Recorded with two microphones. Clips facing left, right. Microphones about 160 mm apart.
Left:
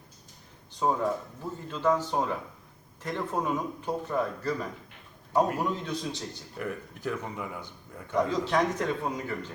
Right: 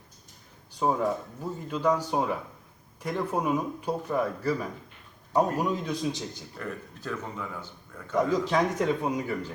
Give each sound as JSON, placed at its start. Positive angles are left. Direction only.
{"t": 0.8, "sound": "speech", "side_deg": -10}
{"t": 6.6, "sound": "speech", "side_deg": 15}
{"t": 8.1, "sound": "speech", "side_deg": -10}